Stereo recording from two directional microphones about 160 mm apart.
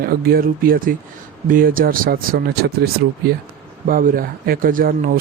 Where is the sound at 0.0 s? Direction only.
70° right (ahead or behind).